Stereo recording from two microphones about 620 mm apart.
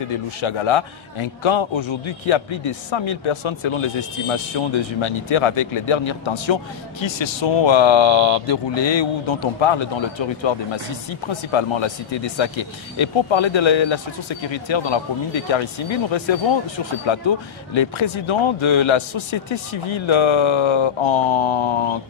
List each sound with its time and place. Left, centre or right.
0.4 s a man's voice: left